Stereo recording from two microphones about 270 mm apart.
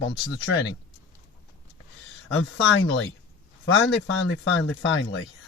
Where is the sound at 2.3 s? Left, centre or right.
Left.